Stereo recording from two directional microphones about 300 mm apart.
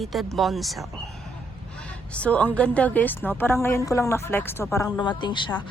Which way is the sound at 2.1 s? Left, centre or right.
Centre.